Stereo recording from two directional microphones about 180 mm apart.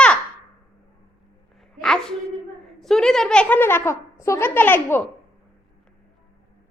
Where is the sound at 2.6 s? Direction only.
Centre (ahead or behind).